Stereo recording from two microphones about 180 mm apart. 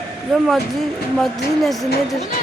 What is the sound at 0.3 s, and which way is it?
Speech, centre (ahead or behind).